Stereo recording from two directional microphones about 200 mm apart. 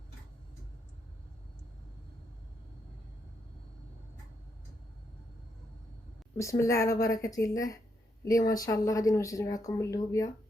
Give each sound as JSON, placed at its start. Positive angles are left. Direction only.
{"t": 6.3, "sound": "a woman's voice", "side_deg": 15}